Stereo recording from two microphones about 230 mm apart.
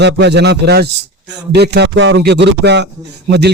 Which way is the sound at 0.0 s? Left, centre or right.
Right.